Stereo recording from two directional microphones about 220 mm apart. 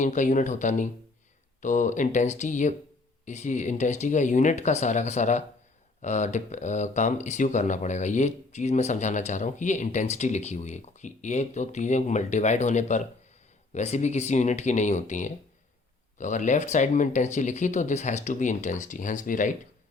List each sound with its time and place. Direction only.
0.0 s speech: 35° left (ahead or behind)